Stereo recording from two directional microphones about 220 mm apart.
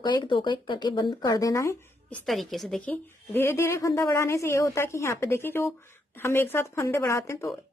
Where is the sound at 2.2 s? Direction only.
Centre (ahead or behind).